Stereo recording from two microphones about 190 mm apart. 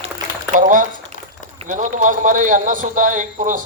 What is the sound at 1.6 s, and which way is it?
A man's voice, 40° right (ahead or behind).